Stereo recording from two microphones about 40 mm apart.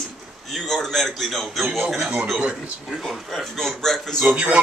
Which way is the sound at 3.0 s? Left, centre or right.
Centre.